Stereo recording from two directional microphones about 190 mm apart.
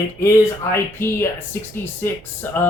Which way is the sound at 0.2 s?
15° left (ahead or behind).